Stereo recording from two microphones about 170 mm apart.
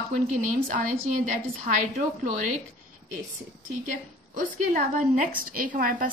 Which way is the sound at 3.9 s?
50° right (ahead or behind).